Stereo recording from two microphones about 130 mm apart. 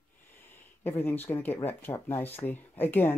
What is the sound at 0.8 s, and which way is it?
Speech, 15° left (ahead or behind).